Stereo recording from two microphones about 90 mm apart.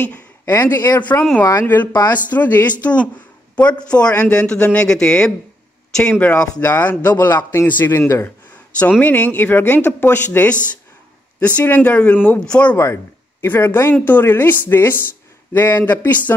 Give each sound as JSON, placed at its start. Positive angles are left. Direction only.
{"t": 0.0, "sound": "a sound", "side_deg": 25}
{"t": 0.9, "sound": "speech", "side_deg": 20}
{"t": 1.9, "sound": "speech", "side_deg": 50}
{"t": 2.2, "sound": "speech", "side_deg": 20}
{"t": 9.0, "sound": "speech", "side_deg": 20}
{"t": 12.7, "sound": "speech", "side_deg": 30}